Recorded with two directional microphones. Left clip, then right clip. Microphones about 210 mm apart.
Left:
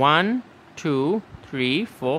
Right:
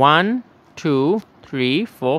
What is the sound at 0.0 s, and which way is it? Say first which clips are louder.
Speech: right 4 dB; 10° right (ahead or behind).